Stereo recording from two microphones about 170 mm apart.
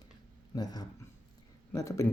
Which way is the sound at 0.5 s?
25° left (ahead or behind).